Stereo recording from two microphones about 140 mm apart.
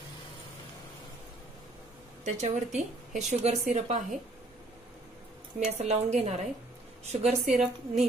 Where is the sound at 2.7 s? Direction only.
55° right (ahead or behind).